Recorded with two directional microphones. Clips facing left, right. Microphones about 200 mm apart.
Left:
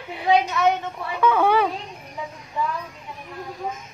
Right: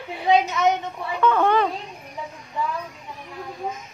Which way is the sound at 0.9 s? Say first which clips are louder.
Even; 5° left (ahead or behind).